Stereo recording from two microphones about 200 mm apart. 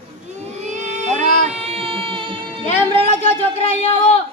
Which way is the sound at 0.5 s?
35° right (ahead or behind).